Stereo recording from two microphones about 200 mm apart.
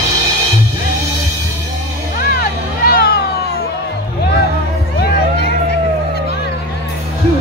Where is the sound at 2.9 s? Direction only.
50° left (ahead or behind).